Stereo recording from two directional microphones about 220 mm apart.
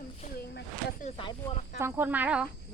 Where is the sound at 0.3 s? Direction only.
45° left (ahead or behind).